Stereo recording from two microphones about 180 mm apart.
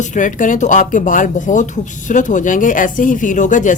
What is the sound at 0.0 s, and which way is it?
A woman's voice, 45° left (ahead or behind).